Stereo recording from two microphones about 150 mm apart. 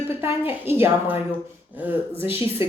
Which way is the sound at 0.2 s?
15° right (ahead or behind).